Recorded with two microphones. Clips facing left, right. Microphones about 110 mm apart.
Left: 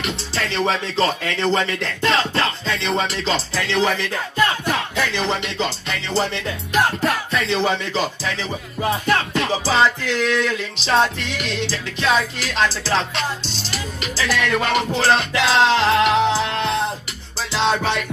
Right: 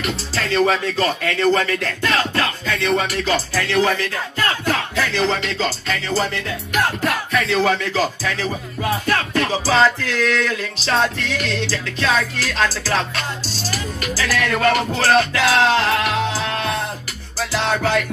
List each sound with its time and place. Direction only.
0.0 s music: 25° left (ahead or behind)